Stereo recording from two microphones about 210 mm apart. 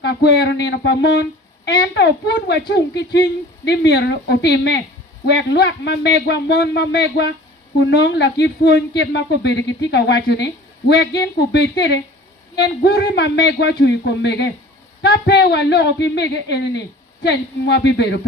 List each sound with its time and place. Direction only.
0.0 s a man's voice: 50° left (ahead or behind)